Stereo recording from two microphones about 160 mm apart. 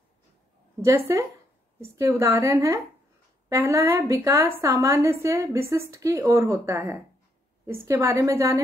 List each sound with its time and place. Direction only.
0.8 s a woman's voice: 15° right (ahead or behind)